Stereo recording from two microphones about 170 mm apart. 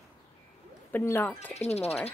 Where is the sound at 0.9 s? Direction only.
10° left (ahead or behind).